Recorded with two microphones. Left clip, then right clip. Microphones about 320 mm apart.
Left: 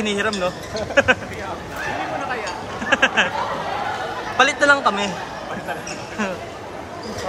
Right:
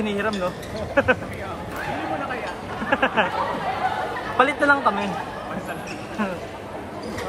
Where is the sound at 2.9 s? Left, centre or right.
Centre.